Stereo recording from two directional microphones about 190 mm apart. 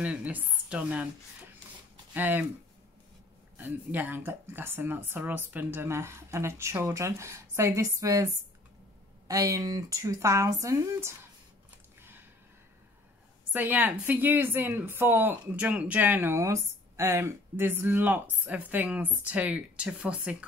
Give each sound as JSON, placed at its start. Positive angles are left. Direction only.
{"t": 0.0, "sound": "a woman's voice", "side_deg": -5}
{"t": 2.1, "sound": "a woman's voice", "side_deg": -10}
{"t": 3.5, "sound": "a woman's voice", "side_deg": -10}
{"t": 9.3, "sound": "a woman's voice", "side_deg": -15}
{"t": 12.0, "sound": "a sound", "side_deg": -10}
{"t": 13.5, "sound": "a woman's voice", "side_deg": -10}